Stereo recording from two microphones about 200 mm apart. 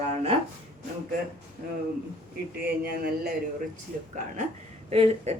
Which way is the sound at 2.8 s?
50° right (ahead or behind).